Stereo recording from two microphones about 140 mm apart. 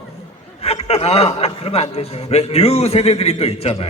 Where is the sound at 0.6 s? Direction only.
45° left (ahead or behind).